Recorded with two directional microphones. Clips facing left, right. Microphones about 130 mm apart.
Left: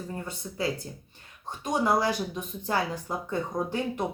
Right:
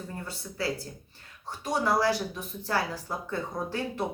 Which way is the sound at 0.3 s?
20° left (ahead or behind).